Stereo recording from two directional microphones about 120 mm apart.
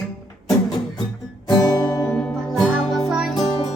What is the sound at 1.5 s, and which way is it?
Music, 30° left (ahead or behind).